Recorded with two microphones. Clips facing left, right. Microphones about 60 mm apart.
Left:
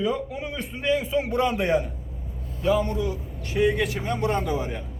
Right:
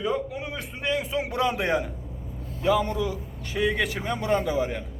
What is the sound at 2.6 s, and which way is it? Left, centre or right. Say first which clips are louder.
Speech: even; right.